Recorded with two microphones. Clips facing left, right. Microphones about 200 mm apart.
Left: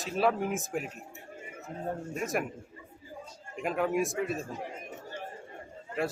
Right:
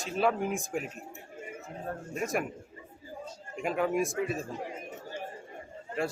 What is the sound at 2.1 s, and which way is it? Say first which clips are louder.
Speech: right 2 dB; centre (ahead or behind).